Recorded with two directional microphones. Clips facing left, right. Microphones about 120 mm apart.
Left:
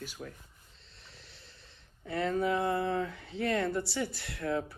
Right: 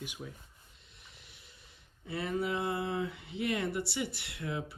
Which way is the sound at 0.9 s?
15° right (ahead or behind).